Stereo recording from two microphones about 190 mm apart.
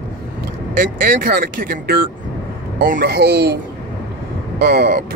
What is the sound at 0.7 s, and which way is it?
Speech, 50° right (ahead or behind).